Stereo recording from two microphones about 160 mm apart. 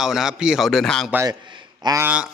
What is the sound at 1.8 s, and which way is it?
Speech, 20° right (ahead or behind).